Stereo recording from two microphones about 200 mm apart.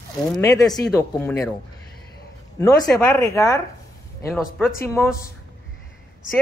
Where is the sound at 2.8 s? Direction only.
15° left (ahead or behind).